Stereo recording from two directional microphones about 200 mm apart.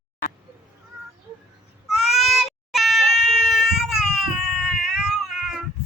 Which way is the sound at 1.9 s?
Centre (ahead or behind).